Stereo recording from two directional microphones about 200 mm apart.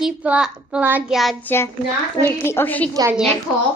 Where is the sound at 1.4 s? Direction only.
10° left (ahead or behind).